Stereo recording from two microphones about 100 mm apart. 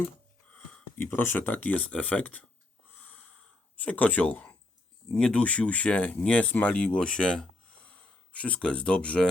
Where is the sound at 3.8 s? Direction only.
15° left (ahead or behind).